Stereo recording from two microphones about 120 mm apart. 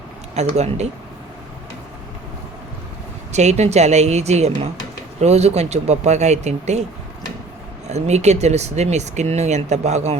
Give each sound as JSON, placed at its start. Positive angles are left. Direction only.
{"t": 0.3, "sound": "speech", "side_deg": -70}
{"t": 3.3, "sound": "speech", "side_deg": -70}
{"t": 7.9, "sound": "speech", "side_deg": -70}